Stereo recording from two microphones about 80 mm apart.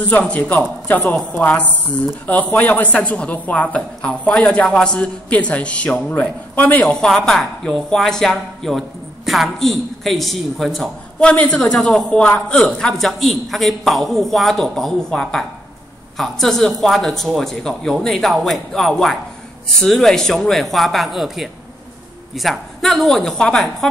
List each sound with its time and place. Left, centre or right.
0.2 s speech: centre
6.9 s a woman's voice: centre